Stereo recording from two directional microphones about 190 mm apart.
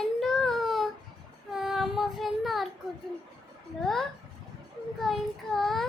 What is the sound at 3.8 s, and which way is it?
A child's voice, centre (ahead or behind).